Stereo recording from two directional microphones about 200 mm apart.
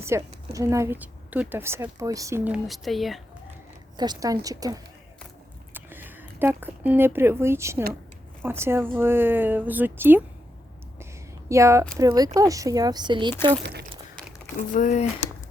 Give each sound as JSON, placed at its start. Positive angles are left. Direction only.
{"t": 0.1, "sound": "a woman's voice", "side_deg": -15}
{"t": 3.9, "sound": "a woman's voice", "side_deg": -20}
{"t": 11.4, "sound": "a woman's voice", "side_deg": -15}
{"t": 13.6, "sound": "speech", "side_deg": -55}
{"t": 14.7, "sound": "speech", "side_deg": 40}